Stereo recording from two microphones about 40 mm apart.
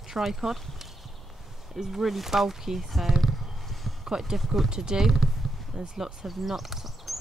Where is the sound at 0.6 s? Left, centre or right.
Centre.